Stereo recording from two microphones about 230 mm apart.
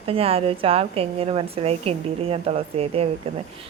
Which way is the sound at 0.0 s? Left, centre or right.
Right.